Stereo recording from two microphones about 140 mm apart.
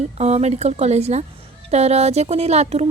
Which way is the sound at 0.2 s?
50° right (ahead or behind).